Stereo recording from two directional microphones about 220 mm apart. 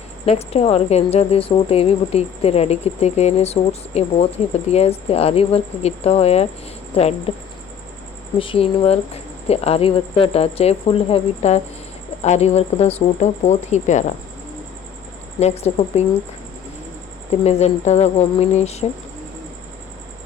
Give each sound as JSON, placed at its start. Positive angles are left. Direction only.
{"t": 0.3, "sound": "a woman's voice", "side_deg": 30}
{"t": 8.4, "sound": "a woman's voice", "side_deg": 25}
{"t": 15.4, "sound": "a woman's voice", "side_deg": 30}
{"t": 17.4, "sound": "a woman's voice", "side_deg": 30}